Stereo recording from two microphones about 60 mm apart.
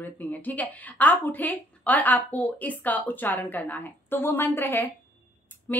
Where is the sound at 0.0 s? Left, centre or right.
Left.